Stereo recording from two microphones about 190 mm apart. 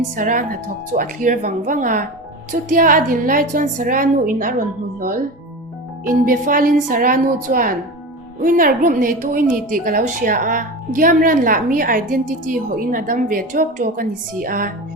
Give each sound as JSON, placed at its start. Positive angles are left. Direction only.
{"t": 0.2, "sound": "speech", "side_deg": -45}